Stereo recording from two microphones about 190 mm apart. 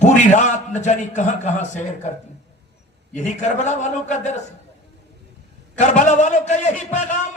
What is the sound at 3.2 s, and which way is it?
A man's voice, 40° left (ahead or behind).